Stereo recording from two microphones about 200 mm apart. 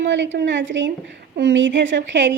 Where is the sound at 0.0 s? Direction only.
65° right (ahead or behind).